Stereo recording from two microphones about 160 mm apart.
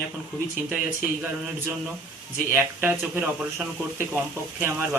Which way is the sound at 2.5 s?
10° right (ahead or behind).